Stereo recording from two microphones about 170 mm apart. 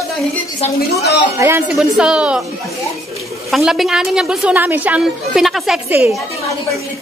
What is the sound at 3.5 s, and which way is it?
A woman's voice, centre (ahead or behind).